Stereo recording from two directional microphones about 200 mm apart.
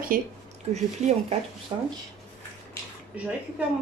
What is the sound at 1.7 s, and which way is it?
Speech, 25° right (ahead or behind).